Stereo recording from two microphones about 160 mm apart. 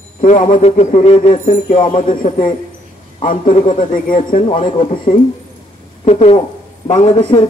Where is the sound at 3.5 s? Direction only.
45° left (ahead or behind).